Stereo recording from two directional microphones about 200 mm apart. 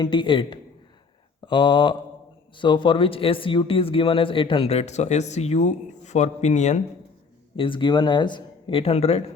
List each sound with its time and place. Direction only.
0.0 s speech: 25° left (ahead or behind)
7.5 s speech: 25° left (ahead or behind)